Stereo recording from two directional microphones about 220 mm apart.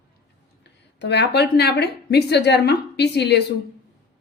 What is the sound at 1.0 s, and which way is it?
A woman's voice, 50° left (ahead or behind).